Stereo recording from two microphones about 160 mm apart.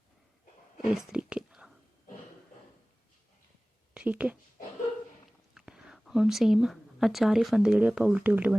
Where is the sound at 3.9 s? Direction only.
10° right (ahead or behind).